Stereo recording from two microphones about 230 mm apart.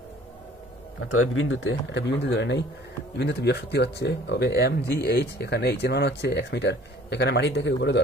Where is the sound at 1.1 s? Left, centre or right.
Left.